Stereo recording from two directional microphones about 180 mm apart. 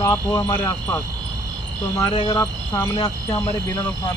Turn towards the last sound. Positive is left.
turn(degrees=25)  # may be behind; listen again after turning